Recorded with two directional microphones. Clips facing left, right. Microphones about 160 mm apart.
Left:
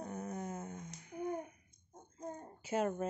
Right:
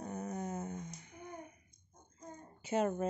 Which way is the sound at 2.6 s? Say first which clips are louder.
Right 2 dB; centre (ahead or behind).